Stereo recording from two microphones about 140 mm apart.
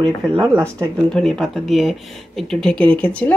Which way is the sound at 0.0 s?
35° right (ahead or behind).